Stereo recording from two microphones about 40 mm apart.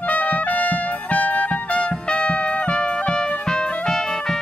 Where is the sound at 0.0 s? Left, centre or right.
Left.